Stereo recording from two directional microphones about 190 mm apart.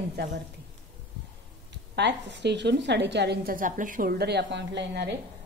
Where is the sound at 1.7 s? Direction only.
65° right (ahead or behind).